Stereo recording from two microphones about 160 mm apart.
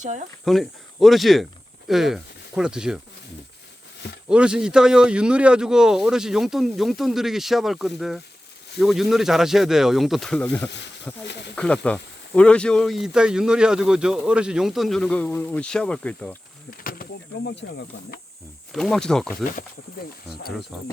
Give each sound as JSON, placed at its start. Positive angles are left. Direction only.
{"t": 0.0, "sound": "speech", "side_deg": -50}
{"t": 0.4, "sound": "speech", "side_deg": 0}
{"t": 4.3, "sound": "speech", "side_deg": -5}
{"t": 16.7, "sound": "speech", "side_deg": 65}
{"t": 18.7, "sound": "speech", "side_deg": 5}
{"t": 19.5, "sound": "speech", "side_deg": 65}
{"t": 20.7, "sound": "speech", "side_deg": -5}